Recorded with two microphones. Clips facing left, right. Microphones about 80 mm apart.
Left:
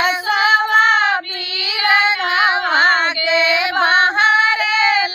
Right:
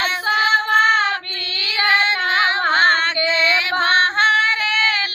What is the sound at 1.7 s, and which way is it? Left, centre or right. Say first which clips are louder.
Child singing: left 2 dB; right.